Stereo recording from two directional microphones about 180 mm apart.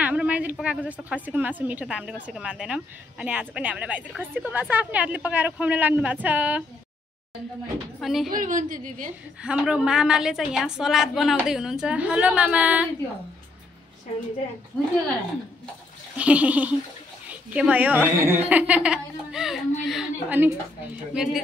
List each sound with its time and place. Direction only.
0.0 s a woman's voice: 10° right (ahead or behind)
8.0 s a woman's voice: centre (ahead or behind)
8.3 s a woman's voice: 45° right (ahead or behind)
9.4 s a woman's voice: 5° right (ahead or behind)
16.2 s a woman's voice: 10° right (ahead or behind)
19.8 s a sound: centre (ahead or behind)
21.1 s a woman's voice: 5° right (ahead or behind)